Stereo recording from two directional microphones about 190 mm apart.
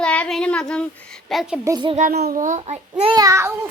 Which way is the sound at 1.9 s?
50° right (ahead or behind).